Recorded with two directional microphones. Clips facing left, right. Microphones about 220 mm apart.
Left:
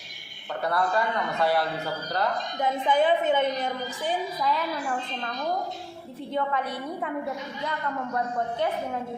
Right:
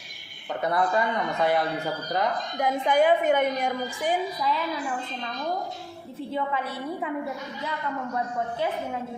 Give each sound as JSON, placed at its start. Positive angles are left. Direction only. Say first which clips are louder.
{"t": 0.6, "sound": "a man's voice", "louder": "right 1 dB", "side_deg": -20}